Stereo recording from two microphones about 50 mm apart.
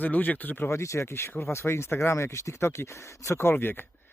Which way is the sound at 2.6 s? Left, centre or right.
Left.